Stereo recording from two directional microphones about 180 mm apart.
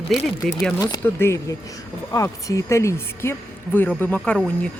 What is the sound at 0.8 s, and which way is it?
Speech, 20° left (ahead or behind).